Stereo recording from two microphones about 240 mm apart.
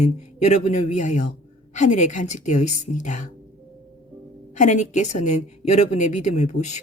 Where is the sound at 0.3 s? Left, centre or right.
Left.